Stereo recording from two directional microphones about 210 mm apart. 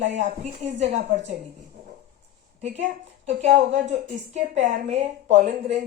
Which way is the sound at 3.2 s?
35° right (ahead or behind).